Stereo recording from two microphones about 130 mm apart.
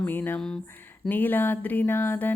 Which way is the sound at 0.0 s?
15° left (ahead or behind).